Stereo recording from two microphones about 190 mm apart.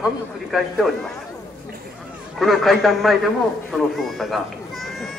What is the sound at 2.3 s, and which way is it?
Speech, centre (ahead or behind).